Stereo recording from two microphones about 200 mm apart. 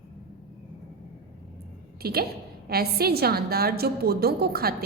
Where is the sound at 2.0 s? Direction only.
50° right (ahead or behind).